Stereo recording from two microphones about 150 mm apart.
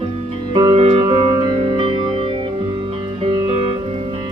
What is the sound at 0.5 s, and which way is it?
Music, 35° right (ahead or behind).